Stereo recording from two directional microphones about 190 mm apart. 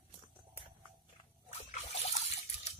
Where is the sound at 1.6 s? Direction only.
35° left (ahead or behind).